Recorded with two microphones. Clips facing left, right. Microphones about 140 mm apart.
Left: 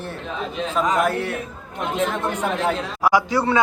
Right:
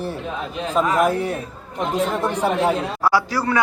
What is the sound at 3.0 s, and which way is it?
Speech, 15° left (ahead or behind).